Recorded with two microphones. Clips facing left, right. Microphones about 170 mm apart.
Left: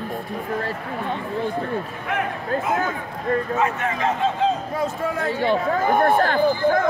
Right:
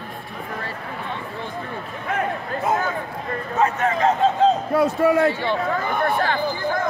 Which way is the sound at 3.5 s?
45° right (ahead or behind).